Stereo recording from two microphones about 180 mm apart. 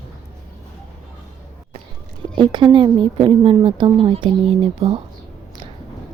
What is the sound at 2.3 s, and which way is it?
A woman's voice, 25° right (ahead or behind).